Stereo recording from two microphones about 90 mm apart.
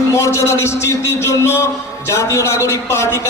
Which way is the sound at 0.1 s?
35° left (ahead or behind).